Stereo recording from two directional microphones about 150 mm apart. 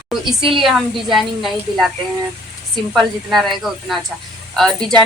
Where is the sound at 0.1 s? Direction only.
Centre (ahead or behind).